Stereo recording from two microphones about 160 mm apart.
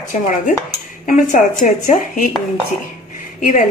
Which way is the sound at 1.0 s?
55° left (ahead or behind).